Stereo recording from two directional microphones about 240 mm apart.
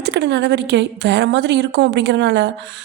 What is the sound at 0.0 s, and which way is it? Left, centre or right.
A woman's voice, right.